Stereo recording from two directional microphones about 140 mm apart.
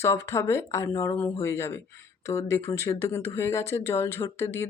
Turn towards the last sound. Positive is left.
turn(degrees=20)  # may be behind; listen again after turning